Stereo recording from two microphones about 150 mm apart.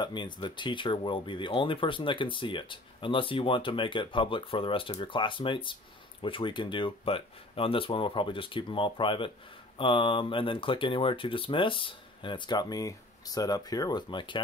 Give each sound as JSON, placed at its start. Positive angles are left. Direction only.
{"t": 0.0, "sound": "speech", "side_deg": 30}